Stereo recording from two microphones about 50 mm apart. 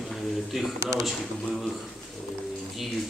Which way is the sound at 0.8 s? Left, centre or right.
Right.